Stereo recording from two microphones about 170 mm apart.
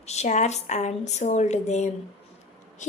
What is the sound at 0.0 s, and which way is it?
A woman's voice, 40° left (ahead or behind).